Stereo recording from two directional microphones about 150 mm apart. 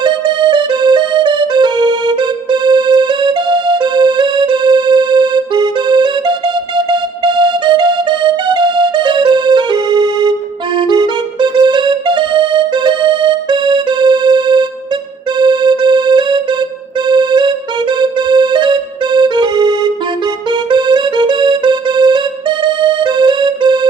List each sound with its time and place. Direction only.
0.0 s music: 30° right (ahead or behind)